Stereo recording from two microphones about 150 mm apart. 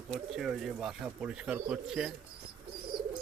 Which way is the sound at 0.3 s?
5° right (ahead or behind).